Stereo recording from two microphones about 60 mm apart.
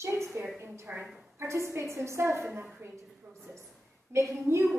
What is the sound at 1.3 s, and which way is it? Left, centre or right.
A woman's voice, right.